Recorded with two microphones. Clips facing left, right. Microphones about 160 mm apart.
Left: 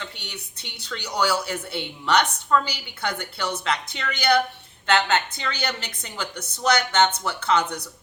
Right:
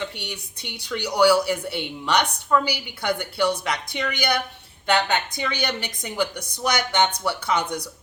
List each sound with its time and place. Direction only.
0.0 s a woman's voice: 15° right (ahead or behind)